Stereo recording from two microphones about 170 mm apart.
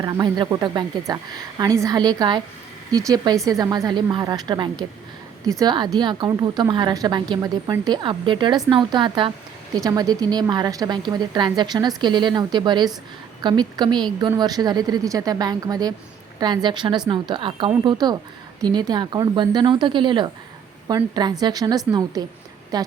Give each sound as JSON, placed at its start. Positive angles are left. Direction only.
{"t": 0.0, "sound": "a woman's voice", "side_deg": -25}